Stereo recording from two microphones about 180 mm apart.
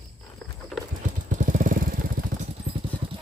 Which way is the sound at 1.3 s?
45° right (ahead or behind).